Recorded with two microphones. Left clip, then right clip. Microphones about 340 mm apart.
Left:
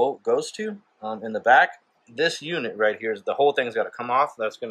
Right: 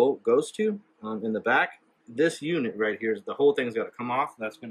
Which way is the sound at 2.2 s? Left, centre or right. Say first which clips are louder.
Left 2 dB; centre.